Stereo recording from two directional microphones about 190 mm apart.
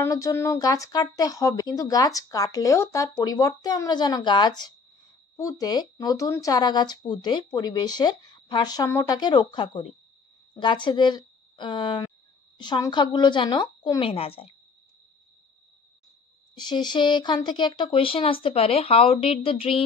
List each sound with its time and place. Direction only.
0.0 s speech: 15° left (ahead or behind); by 14.5 s 30° left (ahead or behind)
16.5 s speech: 25° left (ahead or behind)